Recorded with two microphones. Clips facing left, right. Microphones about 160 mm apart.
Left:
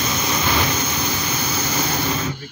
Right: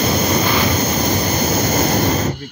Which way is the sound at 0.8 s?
45° right (ahead or behind).